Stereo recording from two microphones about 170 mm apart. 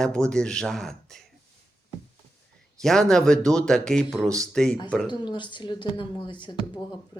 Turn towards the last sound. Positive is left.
turn(degrees=25)  # may be behind; listen again after turning